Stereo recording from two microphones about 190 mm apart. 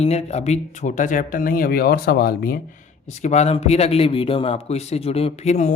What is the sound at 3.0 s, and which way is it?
A man's voice, 35° left (ahead or behind).